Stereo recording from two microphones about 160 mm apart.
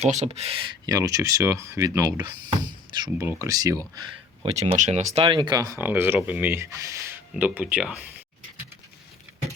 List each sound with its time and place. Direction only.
0.0 s speech: 45° right (ahead or behind)
0.9 s speech: 20° right (ahead or behind)
4.8 s speech: 45° right (ahead or behind); by 7.9 s 5° right (ahead or behind)